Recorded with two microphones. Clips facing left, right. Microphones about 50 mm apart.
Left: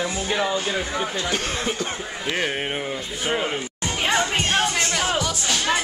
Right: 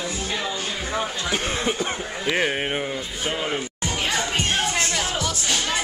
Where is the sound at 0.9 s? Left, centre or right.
Centre.